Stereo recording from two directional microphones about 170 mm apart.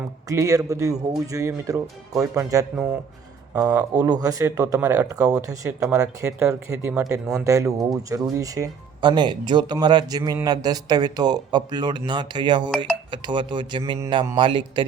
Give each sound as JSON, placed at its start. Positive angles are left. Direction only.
{"t": 0.3, "sound": "speech", "side_deg": -20}
{"t": 3.5, "sound": "speech", "side_deg": -20}